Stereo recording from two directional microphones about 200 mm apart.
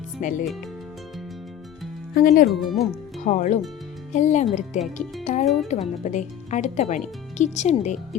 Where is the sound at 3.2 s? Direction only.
35° left (ahead or behind).